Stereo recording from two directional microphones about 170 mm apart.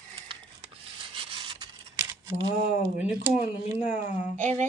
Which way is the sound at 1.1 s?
30° right (ahead or behind).